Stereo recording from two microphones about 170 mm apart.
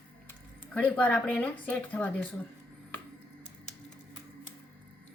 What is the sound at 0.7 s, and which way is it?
Speech, 10° left (ahead or behind).